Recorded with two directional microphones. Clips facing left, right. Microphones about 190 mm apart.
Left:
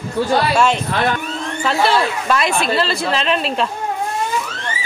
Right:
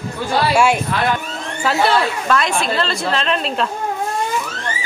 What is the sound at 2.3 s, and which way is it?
A woman's voice, 5° left (ahead or behind).